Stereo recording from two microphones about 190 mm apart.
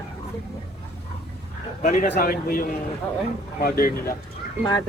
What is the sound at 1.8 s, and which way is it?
A man's voice, 40° left (ahead or behind).